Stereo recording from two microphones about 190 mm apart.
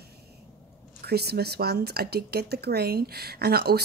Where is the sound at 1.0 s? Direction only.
55° right (ahead or behind).